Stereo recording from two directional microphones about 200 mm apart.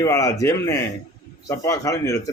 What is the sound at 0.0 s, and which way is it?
Speech, 15° left (ahead or behind).